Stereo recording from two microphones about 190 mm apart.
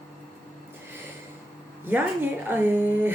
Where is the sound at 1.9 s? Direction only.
10° right (ahead or behind).